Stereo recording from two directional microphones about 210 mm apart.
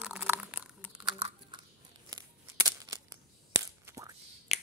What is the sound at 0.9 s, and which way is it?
Crumpling, 25° right (ahead or behind).